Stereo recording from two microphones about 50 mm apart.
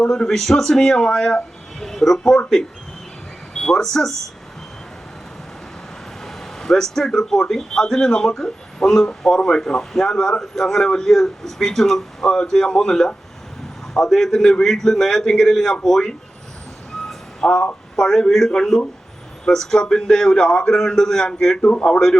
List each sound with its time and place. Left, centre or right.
0.0 s a man's voice: centre
6.2 s a man's voice: centre
17.4 s a man's voice: centre
21.6 s a man's voice: left
21.8 s a man's voice: centre